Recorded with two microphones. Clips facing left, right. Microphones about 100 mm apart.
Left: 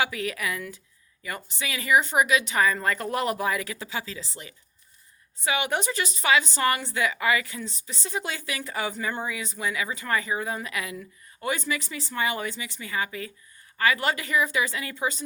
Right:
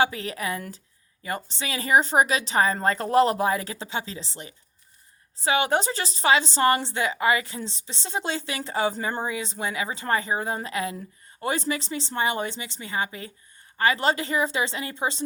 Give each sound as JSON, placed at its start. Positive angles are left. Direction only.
{"t": 0.0, "sound": "a woman's voice", "side_deg": -30}